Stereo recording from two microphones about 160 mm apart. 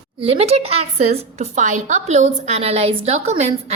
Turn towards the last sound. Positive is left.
turn(degrees=-40)  # may be behind; listen again after turning